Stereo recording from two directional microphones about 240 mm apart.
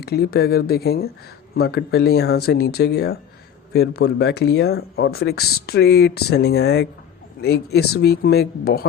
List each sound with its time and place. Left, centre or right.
0.0 s speech: left